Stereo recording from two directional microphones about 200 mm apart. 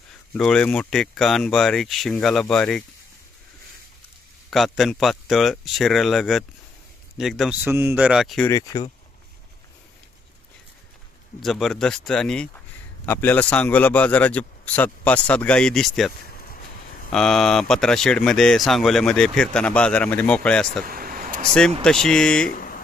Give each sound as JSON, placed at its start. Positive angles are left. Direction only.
{"t": 0.3, "sound": "speech", "side_deg": 5}
{"t": 4.5, "sound": "speech", "side_deg": 0}
{"t": 8.4, "sound": "speech", "side_deg": 20}
{"t": 11.4, "sound": "speech", "side_deg": 0}
{"t": 20.8, "sound": "vehicle", "side_deg": -45}
{"t": 21.8, "sound": "speech", "side_deg": 5}
{"t": 22.4, "sound": "a sound", "side_deg": 45}